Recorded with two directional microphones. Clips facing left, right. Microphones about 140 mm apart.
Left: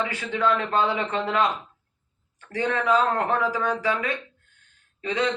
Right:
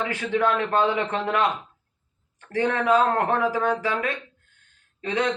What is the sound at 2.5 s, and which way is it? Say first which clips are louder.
A man's voice: right 2 dB; 55° right (ahead or behind).